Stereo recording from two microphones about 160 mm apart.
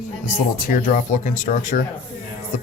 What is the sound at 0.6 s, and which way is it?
Speech, 55° left (ahead or behind).